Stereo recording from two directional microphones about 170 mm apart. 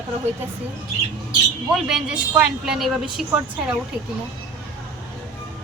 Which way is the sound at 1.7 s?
5° right (ahead or behind).